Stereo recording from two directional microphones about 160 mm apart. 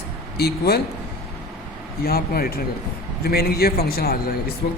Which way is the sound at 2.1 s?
70° left (ahead or behind).